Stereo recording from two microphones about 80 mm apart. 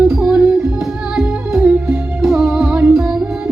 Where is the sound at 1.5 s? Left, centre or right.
Centre.